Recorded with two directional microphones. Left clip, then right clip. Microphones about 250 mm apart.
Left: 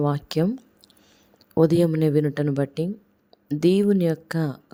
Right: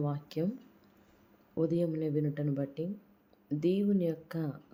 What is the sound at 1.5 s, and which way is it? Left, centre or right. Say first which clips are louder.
A woman's voice: left 12 dB; left.